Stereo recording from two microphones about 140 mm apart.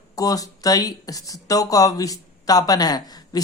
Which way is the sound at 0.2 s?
25° left (ahead or behind).